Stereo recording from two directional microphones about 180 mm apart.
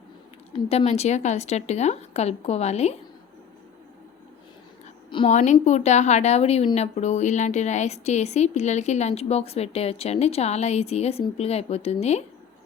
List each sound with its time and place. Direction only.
0.5 s a woman's voice: 35° left (ahead or behind)
5.1 s a woman's voice: 35° left (ahead or behind)